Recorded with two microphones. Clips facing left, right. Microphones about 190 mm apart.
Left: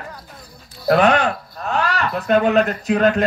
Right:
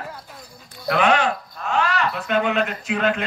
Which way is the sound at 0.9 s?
40° left (ahead or behind).